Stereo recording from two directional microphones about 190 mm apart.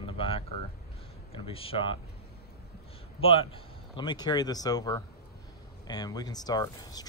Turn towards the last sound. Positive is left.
turn(degrees=20)  # may be behind; listen again after turning